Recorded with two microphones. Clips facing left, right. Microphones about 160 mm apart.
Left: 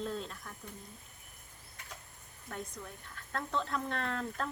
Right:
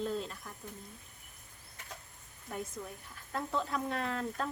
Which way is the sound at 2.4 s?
5° right (ahead or behind).